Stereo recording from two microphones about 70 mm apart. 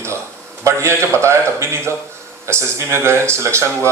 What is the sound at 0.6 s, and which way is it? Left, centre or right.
Speech, right.